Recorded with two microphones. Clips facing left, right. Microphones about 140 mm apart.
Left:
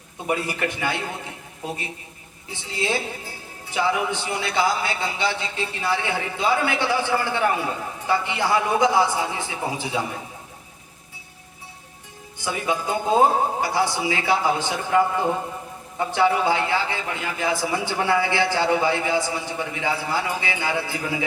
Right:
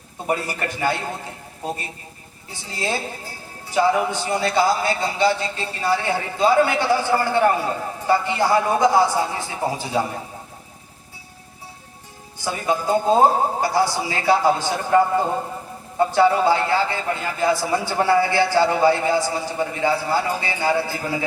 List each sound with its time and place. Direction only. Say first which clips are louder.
0.3 s a man's voice: right 1 dB; 40° right (ahead or behind)
12.4 s speech: right 2 dB; 45° right (ahead or behind)